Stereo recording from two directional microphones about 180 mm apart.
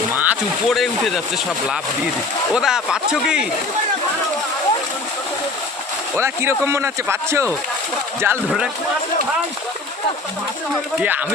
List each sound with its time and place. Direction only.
0.1 s a sound: 10° right (ahead or behind)
0.7 s a man's voice: centre (ahead or behind)
2.6 s a man's voice: 5° right (ahead or behind)
6.1 s speech: 15° right (ahead or behind)